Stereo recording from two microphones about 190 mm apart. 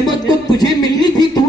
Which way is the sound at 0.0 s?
20° left (ahead or behind).